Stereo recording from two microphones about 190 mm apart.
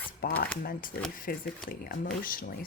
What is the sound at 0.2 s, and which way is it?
Speech, 45° left (ahead or behind).